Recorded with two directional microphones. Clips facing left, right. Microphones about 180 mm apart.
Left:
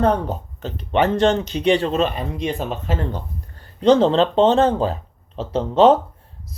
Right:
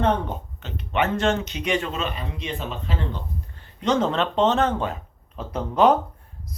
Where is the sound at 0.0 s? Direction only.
35° left (ahead or behind).